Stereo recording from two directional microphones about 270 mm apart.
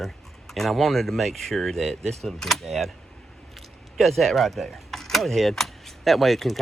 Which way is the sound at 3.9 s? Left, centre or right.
Centre.